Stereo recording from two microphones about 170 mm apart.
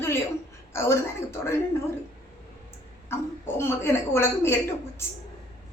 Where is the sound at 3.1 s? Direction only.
15° left (ahead or behind).